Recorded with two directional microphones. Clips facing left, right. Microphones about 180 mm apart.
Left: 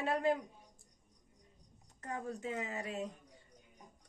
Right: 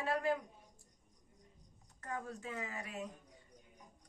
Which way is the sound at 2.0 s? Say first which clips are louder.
Left 3 dB; 20° left (ahead or behind).